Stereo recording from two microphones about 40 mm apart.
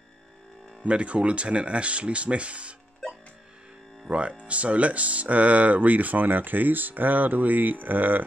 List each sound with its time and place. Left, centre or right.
0.8 s speech: right
4.1 s speech: right